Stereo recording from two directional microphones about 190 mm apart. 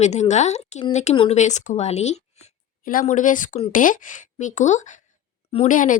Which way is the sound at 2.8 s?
45° left (ahead or behind).